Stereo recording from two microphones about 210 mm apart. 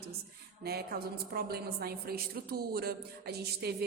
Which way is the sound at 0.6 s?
50° right (ahead or behind).